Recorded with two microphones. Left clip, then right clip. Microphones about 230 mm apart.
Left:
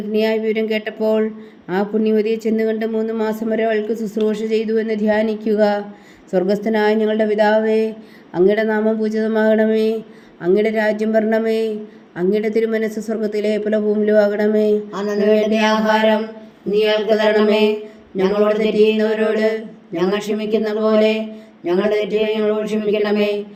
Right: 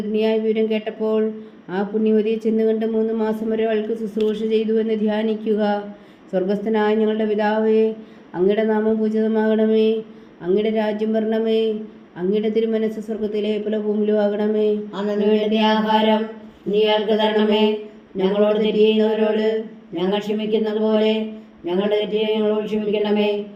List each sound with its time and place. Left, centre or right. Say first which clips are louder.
0.1 s a woman's voice: left 2 dB; left
15.6 s mantra: left 2 dB; left
16.8 s a woman's voice: left 3 dB; left